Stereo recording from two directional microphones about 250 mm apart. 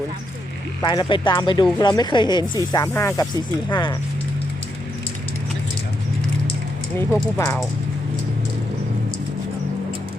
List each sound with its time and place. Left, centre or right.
0.8 s speech: centre
7.3 s speech: centre